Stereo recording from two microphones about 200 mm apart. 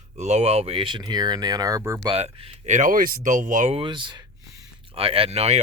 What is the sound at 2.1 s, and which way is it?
Speech, 30° right (ahead or behind).